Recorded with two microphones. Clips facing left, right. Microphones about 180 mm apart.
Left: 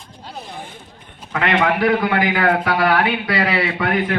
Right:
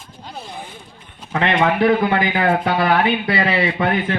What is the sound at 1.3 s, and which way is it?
A man's voice, 25° right (ahead or behind).